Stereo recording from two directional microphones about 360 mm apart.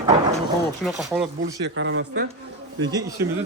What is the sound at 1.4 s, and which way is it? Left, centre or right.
Speech, right.